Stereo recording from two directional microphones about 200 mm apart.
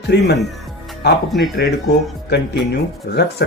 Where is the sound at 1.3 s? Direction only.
Centre (ahead or behind).